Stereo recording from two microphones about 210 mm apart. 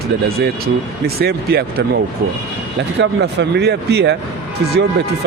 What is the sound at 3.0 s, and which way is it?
Speech, 55° right (ahead or behind).